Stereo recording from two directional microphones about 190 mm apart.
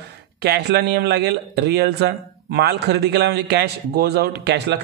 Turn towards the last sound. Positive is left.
turn(degrees=-60)  # may be behind; listen again after turning